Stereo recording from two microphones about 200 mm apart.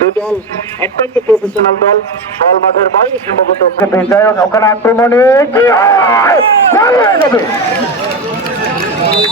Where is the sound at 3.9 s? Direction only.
10° left (ahead or behind).